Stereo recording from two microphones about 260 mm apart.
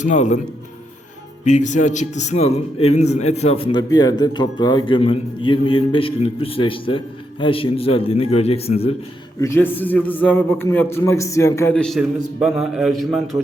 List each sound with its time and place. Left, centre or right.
0.0 s a man's voice: left
1.5 s a man's voice: left
9.4 s a man's voice: centre